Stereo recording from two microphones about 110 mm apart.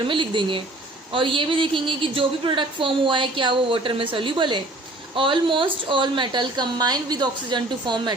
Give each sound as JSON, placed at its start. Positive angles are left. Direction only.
{"t": 0.1, "sound": "a woman's voice", "side_deg": -50}